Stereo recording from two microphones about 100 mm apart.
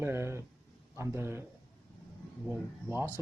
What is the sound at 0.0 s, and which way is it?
Speech, 25° right (ahead or behind).